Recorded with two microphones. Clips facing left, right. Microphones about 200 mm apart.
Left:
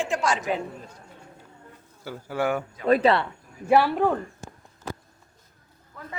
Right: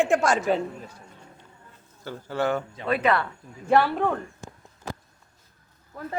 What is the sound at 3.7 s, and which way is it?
Speech, 5° left (ahead or behind).